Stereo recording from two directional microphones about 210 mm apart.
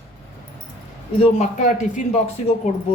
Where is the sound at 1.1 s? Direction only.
30° left (ahead or behind).